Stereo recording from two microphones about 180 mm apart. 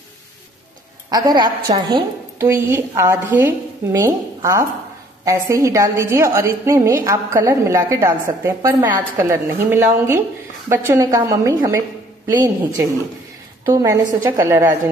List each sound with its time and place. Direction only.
1.1 s a woman's voice: 20° right (ahead or behind)
2.4 s a woman's voice: 15° right (ahead or behind)